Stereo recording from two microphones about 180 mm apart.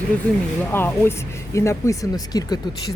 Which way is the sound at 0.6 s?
10° left (ahead or behind).